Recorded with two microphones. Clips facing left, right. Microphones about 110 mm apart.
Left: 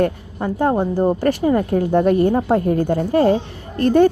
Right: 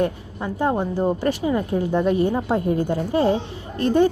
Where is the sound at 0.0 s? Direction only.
50° left (ahead or behind).